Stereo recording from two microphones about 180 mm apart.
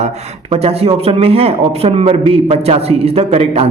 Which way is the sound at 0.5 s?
35° right (ahead or behind).